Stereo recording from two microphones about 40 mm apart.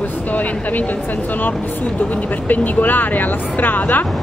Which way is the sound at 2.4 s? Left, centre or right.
Left.